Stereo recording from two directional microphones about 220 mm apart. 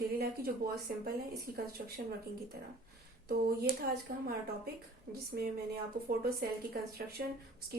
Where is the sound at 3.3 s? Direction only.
45° right (ahead or behind).